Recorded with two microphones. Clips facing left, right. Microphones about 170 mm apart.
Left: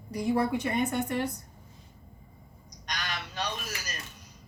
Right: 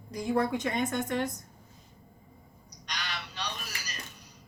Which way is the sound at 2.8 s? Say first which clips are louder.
Left 2 dB; 45° left (ahead or behind).